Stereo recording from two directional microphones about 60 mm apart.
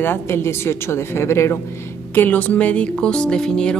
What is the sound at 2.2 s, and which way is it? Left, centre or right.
A woman's voice, left.